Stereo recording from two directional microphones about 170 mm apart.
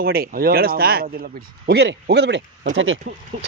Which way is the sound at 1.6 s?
80° right.